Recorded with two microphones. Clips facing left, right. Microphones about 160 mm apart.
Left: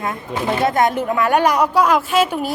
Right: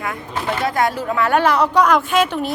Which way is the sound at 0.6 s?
20° left (ahead or behind).